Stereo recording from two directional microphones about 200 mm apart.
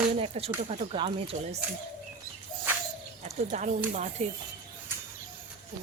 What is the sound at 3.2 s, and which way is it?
Speech, 35° right (ahead or behind).